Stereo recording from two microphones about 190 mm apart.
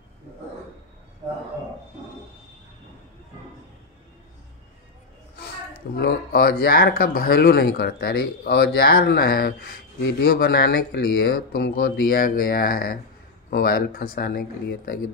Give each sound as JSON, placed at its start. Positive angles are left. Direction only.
{"t": 5.9, "sound": "speech", "side_deg": 55}